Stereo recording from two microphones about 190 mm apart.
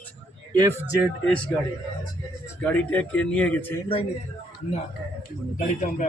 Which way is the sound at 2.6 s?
10° left (ahead or behind).